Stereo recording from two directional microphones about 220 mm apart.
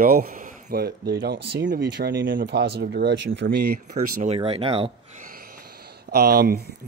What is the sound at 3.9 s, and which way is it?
Speech, 35° right (ahead or behind).